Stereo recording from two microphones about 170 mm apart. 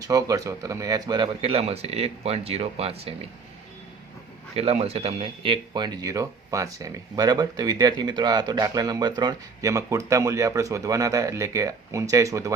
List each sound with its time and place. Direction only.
0.0 s speech: 20° right (ahead or behind)
4.5 s speech: 35° right (ahead or behind); by 12.5 s 20° right (ahead or behind)